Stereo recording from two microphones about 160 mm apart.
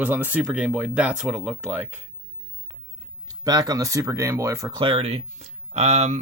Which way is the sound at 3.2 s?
25° right (ahead or behind).